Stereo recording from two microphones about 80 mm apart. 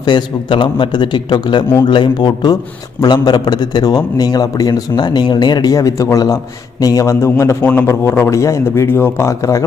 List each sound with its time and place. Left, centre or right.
0.0 s a man's voice: left